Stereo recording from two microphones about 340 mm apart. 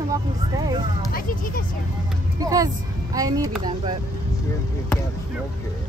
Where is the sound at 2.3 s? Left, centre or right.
Centre.